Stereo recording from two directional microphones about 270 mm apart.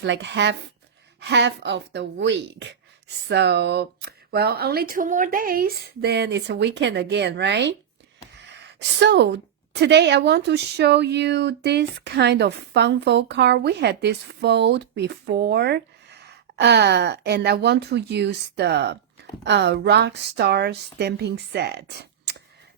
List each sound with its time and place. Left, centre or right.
0.0 s speech: right
8.4 s a sound: right
9.7 s speech: right